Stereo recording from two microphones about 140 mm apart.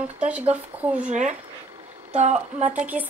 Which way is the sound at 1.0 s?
60° right (ahead or behind).